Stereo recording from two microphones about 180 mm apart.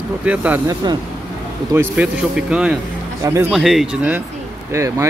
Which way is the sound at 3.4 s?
Centre (ahead or behind).